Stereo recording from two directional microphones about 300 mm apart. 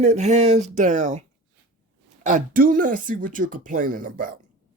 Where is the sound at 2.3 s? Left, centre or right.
Right.